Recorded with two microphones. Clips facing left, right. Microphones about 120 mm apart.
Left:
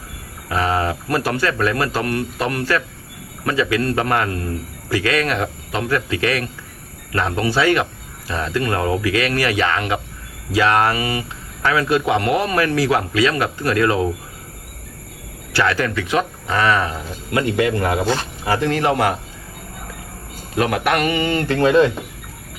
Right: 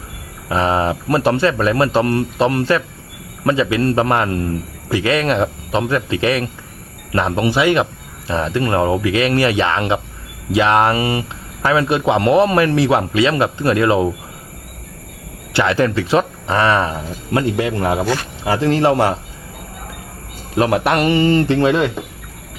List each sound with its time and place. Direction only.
0.4 s speech: 25° right (ahead or behind)
15.5 s speech: 20° right (ahead or behind)
20.6 s speech: 30° right (ahead or behind)